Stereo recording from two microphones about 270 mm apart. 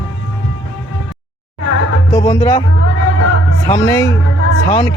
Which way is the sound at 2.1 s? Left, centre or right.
Centre.